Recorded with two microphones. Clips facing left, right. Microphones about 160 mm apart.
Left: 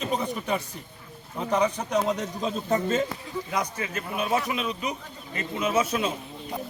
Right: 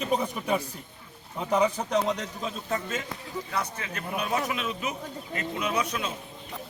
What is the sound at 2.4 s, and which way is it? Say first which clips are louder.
Speech: left 7 dB; 30° left (ahead or behind).